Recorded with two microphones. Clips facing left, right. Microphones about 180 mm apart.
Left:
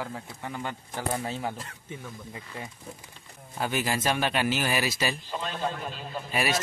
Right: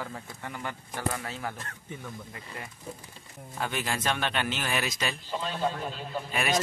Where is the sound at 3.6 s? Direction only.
5° left (ahead or behind).